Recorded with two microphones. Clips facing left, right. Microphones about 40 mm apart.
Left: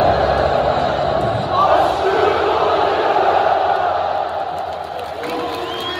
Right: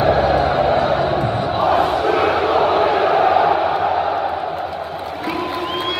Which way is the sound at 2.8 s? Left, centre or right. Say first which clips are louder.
Right 1 dB; right.